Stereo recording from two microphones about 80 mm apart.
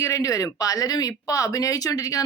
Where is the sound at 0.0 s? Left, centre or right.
Left.